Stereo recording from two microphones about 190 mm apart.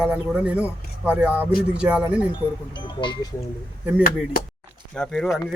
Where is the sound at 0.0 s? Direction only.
5° right (ahead or behind).